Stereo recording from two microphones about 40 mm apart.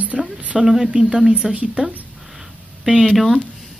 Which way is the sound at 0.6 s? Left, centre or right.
Centre.